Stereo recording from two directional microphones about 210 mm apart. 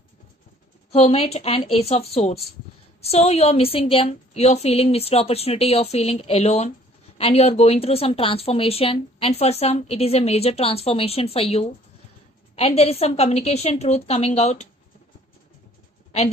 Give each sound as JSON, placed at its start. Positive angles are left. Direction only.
{"t": 0.9, "sound": "a woman's voice", "side_deg": 30}